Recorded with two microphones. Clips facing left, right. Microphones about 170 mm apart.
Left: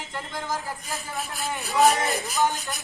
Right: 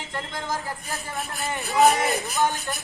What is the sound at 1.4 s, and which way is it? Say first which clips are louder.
Speech: right 1 dB; centre (ahead or behind).